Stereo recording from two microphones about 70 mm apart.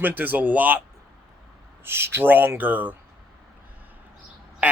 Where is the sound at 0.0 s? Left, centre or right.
Right.